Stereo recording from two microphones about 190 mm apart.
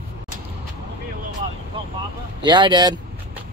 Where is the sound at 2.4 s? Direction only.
25° right (ahead or behind).